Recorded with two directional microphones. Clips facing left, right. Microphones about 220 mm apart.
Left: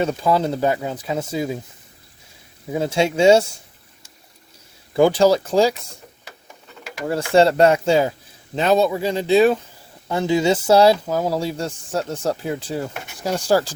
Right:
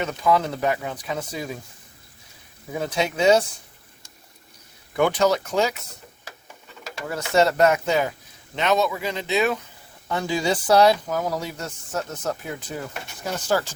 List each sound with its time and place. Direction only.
0.0 s speech: 30° left (ahead or behind)
2.7 s speech: 25° left (ahead or behind)
4.9 s speech: 30° left (ahead or behind)
7.1 s speech: 30° left (ahead or behind)